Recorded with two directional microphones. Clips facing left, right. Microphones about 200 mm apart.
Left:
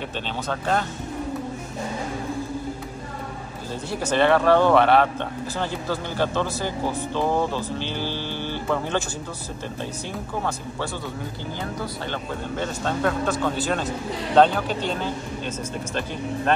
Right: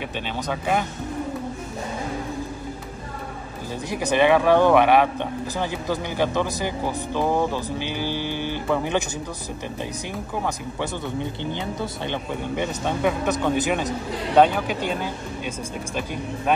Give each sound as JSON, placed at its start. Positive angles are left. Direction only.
{"t": 0.5, "sound": "speech", "side_deg": -10}
{"t": 3.9, "sound": "speech", "side_deg": -15}
{"t": 11.8, "sound": "speech", "side_deg": -15}